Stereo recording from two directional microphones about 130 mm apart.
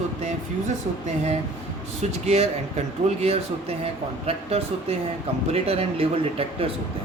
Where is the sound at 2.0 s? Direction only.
55° right (ahead or behind).